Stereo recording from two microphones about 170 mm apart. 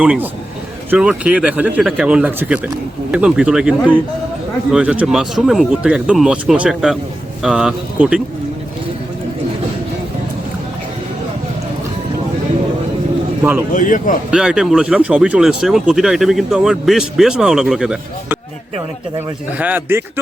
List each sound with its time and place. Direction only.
0.0 s speech: 5° right (ahead or behind)
13.4 s speech: 10° right (ahead or behind)
13.7 s speech: 50° left (ahead or behind)
14.3 s speech: 5° right (ahead or behind)
19.5 s speech: 10° right (ahead or behind)